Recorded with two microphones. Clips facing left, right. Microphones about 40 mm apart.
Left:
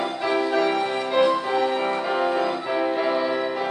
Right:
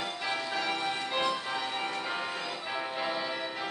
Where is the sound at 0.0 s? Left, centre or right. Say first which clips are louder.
Left 10 dB; centre.